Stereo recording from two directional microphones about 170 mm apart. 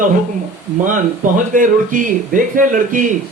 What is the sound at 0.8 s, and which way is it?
Speech, 50° right (ahead or behind).